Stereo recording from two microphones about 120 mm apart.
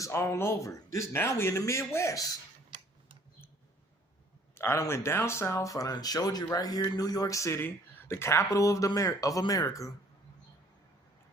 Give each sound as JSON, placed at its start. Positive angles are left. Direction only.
{"t": 0.0, "sound": "speech", "side_deg": 20}
{"t": 2.6, "sound": "tick-tock", "side_deg": -40}
{"t": 4.5, "sound": "speech", "side_deg": 20}